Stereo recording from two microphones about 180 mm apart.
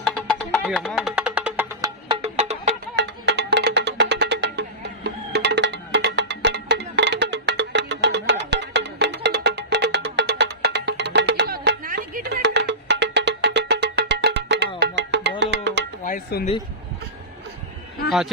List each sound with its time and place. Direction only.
0.0 s music: 5° left (ahead or behind)
2.0 s music: 35° right (ahead or behind)
2.9 s music: 70° right (ahead or behind)
11.9 s music: 50° right (ahead or behind); by 15.9 s 75° right (ahead or behind)
16.0 s a sound: 50° left (ahead or behind)